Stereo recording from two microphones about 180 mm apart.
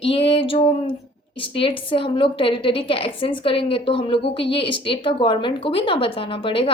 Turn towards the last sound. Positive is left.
turn(degrees=30)  # may be behind; listen again after turning